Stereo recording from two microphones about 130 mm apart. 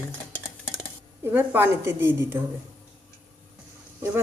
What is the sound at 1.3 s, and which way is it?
Speech, 15° right (ahead or behind).